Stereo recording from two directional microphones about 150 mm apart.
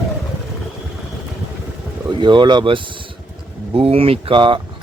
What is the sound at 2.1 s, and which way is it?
Speech, 30° right (ahead or behind).